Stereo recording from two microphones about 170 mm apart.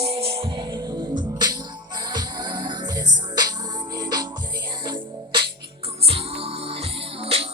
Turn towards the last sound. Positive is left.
turn(degrees=-35)  # may be behind; listen again after turning